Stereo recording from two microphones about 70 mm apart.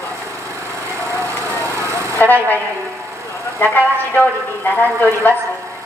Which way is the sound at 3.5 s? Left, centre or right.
Left.